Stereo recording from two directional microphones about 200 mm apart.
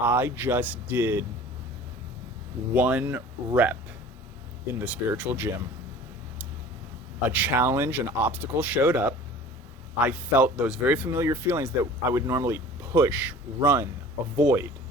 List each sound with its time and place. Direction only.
0.0 s speech: 10° right (ahead or behind)
2.7 s speech: 10° right (ahead or behind)
7.2 s speech: 10° right (ahead or behind)
13.6 s speech: 20° right (ahead or behind)